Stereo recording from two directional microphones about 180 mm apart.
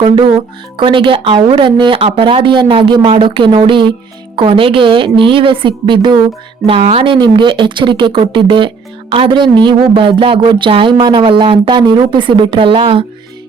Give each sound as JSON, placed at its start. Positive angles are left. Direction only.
{"t": 0.0, "sound": "a woman's voice", "side_deg": -30}